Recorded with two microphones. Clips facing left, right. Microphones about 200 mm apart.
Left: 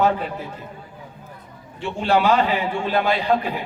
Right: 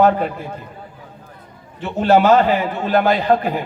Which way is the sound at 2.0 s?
45° right (ahead or behind).